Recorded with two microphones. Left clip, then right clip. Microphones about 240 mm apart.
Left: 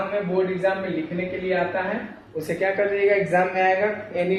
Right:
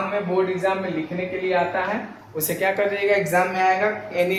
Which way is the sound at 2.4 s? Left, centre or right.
Right.